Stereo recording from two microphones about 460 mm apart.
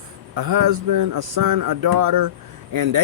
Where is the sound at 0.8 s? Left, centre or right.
Right.